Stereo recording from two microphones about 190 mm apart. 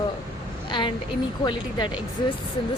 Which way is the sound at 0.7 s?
25° left (ahead or behind).